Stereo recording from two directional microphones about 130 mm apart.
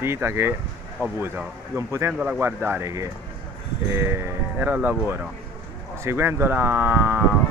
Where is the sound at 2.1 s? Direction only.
10° right (ahead or behind).